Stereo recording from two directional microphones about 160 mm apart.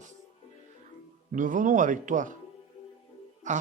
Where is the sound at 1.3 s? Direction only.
55° right (ahead or behind).